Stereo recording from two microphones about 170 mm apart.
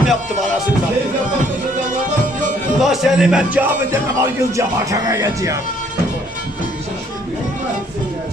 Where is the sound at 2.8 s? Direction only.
Centre (ahead or behind).